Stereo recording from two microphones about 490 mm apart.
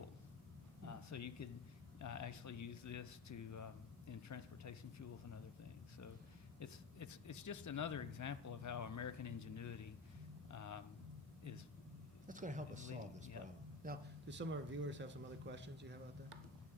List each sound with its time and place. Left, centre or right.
0.9 s a sound: left
2.0 s speech: left
6.6 s speech: left
12.3 s a man's voice: centre